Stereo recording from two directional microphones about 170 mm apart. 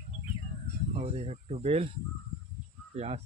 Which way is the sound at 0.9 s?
35° right (ahead or behind).